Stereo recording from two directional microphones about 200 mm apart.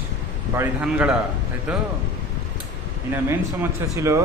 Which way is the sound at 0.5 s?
5° right (ahead or behind).